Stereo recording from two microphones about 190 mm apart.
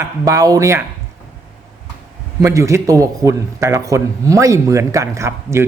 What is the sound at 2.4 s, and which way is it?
A man's voice, 15° right (ahead or behind).